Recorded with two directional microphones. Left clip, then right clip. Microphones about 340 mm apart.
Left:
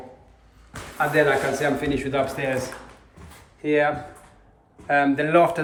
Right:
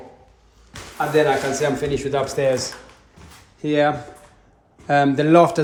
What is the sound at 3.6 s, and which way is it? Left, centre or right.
Speech, centre.